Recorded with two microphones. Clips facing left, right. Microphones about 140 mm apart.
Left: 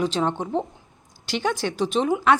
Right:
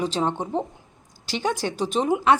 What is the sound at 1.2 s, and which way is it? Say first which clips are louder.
Speech: left 1 dB; 35° right (ahead or behind).